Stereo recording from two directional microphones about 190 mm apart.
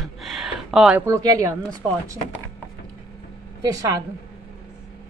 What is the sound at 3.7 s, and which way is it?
Speech, 15° right (ahead or behind).